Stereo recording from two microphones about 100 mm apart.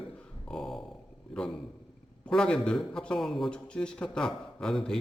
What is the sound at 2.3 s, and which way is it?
A man's voice, 10° left (ahead or behind).